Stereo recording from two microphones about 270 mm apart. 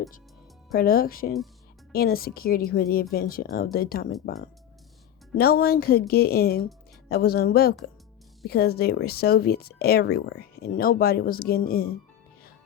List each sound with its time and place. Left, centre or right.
0.7 s speech: left
5.4 s speech: left